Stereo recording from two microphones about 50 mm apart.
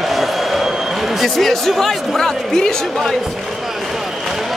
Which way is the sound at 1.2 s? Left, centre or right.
Centre.